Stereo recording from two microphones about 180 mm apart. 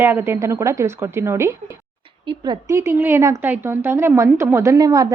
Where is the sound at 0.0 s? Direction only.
10° right (ahead or behind).